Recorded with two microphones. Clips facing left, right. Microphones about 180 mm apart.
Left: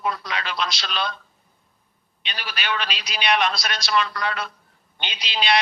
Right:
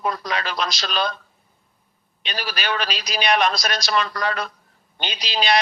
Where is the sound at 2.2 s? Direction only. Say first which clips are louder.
Right 4 dB; 40° right (ahead or behind).